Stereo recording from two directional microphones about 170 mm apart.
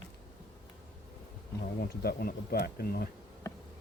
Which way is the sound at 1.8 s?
65° left (ahead or behind).